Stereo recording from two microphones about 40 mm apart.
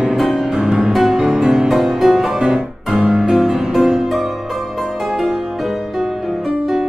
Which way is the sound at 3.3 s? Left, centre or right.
Centre.